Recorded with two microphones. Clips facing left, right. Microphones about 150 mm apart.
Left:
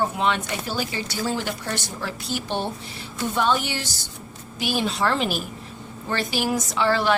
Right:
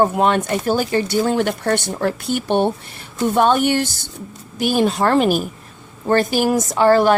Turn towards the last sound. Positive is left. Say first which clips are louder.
# right 8 dB
turn(degrees=-45)  # may be behind; listen again after turning